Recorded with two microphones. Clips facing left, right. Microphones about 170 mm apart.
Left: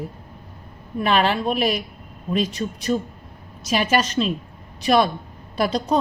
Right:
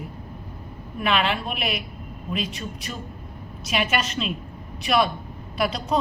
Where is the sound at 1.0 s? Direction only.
40° left (ahead or behind).